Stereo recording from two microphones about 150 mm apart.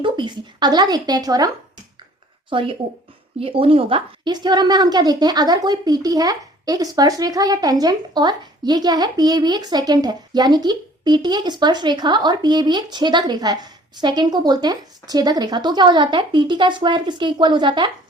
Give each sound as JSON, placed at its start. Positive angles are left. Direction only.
{"t": 0.0, "sound": "a woman's voice", "side_deg": -30}
{"t": 2.5, "sound": "a woman's voice", "side_deg": -35}